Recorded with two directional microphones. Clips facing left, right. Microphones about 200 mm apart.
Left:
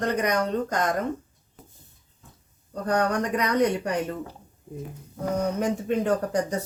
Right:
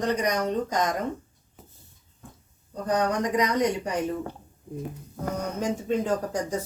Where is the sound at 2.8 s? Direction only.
60° left (ahead or behind).